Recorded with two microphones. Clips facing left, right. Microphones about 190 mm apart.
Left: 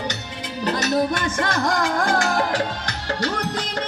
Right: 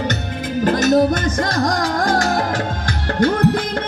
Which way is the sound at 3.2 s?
55° right (ahead or behind).